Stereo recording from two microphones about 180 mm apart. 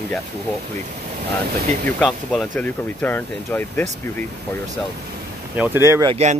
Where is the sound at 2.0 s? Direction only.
5° left (ahead or behind).